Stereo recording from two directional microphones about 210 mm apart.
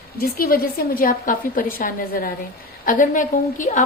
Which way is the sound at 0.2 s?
45° left (ahead or behind).